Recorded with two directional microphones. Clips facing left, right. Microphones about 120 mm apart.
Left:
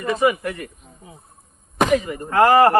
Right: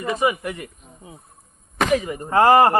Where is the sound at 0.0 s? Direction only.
15° right (ahead or behind).